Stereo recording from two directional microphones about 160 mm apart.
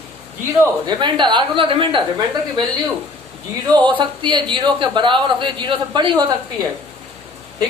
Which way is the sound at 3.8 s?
30° right (ahead or behind).